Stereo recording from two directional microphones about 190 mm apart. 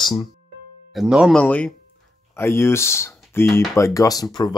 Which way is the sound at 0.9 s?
5° right (ahead or behind).